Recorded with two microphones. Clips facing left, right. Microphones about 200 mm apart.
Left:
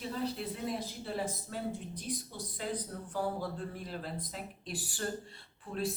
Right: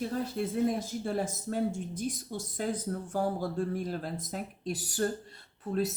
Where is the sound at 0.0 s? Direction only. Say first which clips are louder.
Right 4 dB; 50° right (ahead or behind).